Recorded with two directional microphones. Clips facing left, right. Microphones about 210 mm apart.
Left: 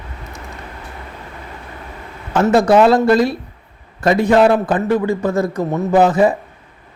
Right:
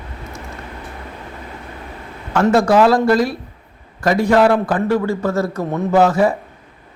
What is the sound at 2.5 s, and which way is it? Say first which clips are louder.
A man's voice: left 2 dB; 20° left (ahead or behind).